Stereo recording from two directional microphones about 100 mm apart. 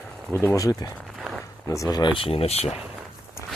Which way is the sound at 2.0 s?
65° left (ahead or behind).